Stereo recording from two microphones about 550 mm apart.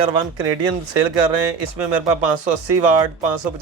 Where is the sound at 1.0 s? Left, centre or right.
Right.